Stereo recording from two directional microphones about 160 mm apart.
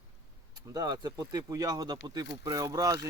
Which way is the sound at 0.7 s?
25° right (ahead or behind).